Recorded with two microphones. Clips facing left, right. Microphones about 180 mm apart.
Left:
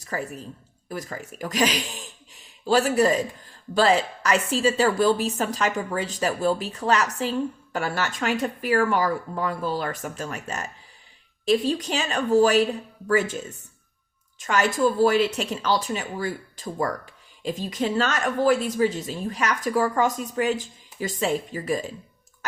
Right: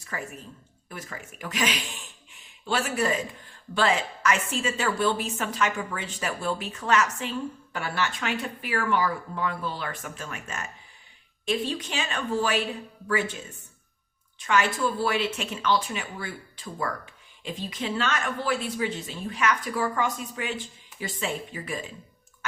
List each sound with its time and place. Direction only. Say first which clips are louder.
0.0 s a woman's voice: left 6 dB; 35° left (ahead or behind)